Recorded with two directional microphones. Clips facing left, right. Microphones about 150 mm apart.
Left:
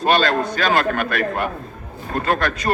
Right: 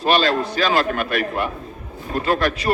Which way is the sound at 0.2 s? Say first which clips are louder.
Even; 50° left (ahead or behind).